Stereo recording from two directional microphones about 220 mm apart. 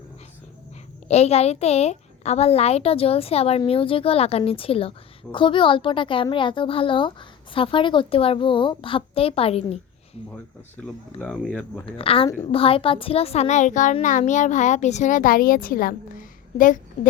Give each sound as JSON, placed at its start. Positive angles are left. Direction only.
{"t": 1.0, "sound": "a woman's voice", "side_deg": 30}
{"t": 10.8, "sound": "speech", "side_deg": 5}
{"t": 11.9, "sound": "a child's voice", "side_deg": 25}